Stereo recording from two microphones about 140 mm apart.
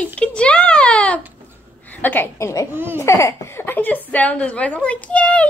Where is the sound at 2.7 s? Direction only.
15° right (ahead or behind).